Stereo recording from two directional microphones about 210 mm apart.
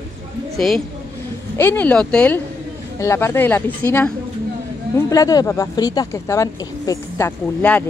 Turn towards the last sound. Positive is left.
turn(degrees=10)  # may be behind; listen again after turning